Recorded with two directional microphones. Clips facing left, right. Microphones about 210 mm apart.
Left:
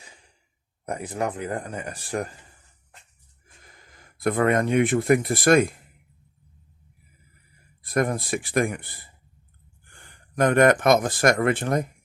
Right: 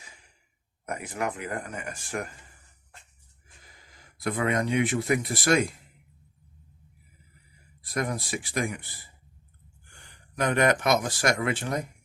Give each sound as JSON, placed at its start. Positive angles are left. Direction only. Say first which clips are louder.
{"t": 0.9, "sound": "speech", "louder": "left 4 dB", "side_deg": 30}
{"t": 3.9, "sound": "speech", "louder": "left 6 dB", "side_deg": 50}
{"t": 7.9, "sound": "speech", "louder": "left 6 dB", "side_deg": 55}